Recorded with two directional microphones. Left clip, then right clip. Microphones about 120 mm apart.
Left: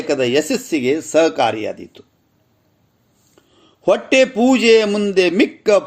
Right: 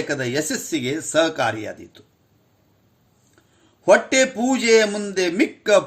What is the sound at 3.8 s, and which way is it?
Speech, 25° left (ahead or behind).